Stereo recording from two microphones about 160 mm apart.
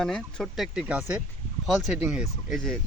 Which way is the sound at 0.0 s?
5° left (ahead or behind).